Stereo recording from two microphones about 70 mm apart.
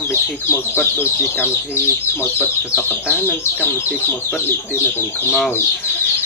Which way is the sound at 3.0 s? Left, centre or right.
Left.